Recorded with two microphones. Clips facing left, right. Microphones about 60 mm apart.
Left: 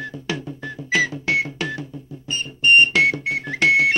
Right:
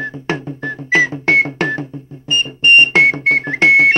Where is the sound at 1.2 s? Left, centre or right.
Right.